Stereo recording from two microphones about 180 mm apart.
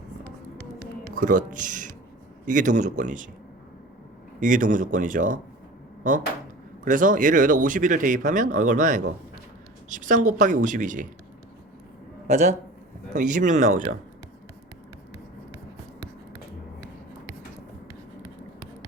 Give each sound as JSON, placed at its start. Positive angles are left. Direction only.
{"t": 1.1, "sound": "speech", "side_deg": -45}
{"t": 4.4, "sound": "speech", "side_deg": -45}
{"t": 12.3, "sound": "a man's voice", "side_deg": -40}